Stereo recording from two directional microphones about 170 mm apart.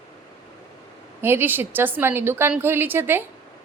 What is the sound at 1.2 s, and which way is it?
A woman's voice, 15° right (ahead or behind).